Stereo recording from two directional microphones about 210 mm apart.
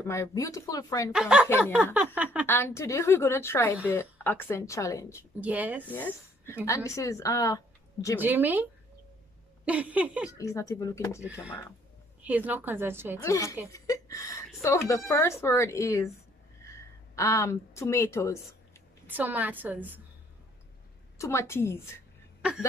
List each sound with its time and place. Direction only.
0.0 s speech: 15° left (ahead or behind)
1.1 s speech: 5° right (ahead or behind)
2.4 s speech: 10° left (ahead or behind)
5.4 s a woman's voice: 5° right (ahead or behind)
5.9 s speech: 10° left (ahead or behind)
8.2 s a woman's voice: 10° right (ahead or behind)
9.7 s a woman's voice: 5° right (ahead or behind)
10.3 s speech: 15° left (ahead or behind)
12.2 s a woman's voice: 10° right (ahead or behind)
13.2 s a woman's voice: 15° left (ahead or behind)
19.0 s a woman's voice: 10° right (ahead or behind)
21.2 s speech: 15° left (ahead or behind)